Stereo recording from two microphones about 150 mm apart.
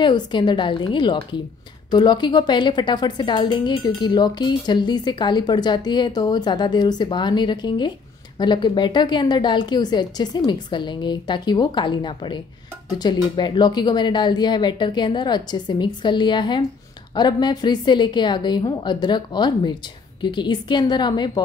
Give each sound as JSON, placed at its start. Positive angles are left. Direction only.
{"t": 0.0, "sound": "a woman's voice", "side_deg": 30}